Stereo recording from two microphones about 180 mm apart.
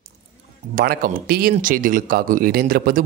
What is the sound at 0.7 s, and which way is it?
Speech, 55° right (ahead or behind).